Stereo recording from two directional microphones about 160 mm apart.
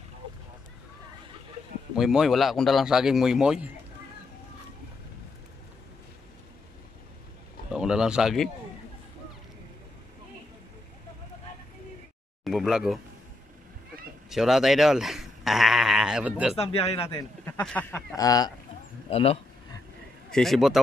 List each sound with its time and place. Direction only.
2.0 s speech: centre (ahead or behind)
7.7 s bird: 5° right (ahead or behind)
12.4 s speech: 5° right (ahead or behind)
14.3 s speech: centre (ahead or behind)
16.5 s speech: 40° left (ahead or behind)
17.5 s speech: 10° left (ahead or behind)
18.1 s speech: 20° left (ahead or behind)
19.0 s speech: 40° left (ahead or behind)
20.2 s speech: centre (ahead or behind)